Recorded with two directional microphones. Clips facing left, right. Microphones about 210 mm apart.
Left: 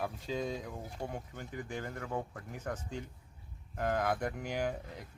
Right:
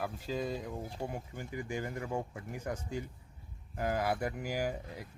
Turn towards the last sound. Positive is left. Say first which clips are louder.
# even
turn(degrees=-5)  # may be behind; listen again after turning